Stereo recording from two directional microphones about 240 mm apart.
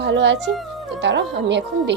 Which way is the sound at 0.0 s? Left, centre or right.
Right.